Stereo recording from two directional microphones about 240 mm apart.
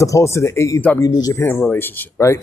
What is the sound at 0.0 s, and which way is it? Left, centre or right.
Speech, centre.